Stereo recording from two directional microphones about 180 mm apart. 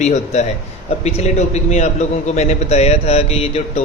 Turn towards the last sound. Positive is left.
turn(degrees=35)  # may be behind; listen again after turning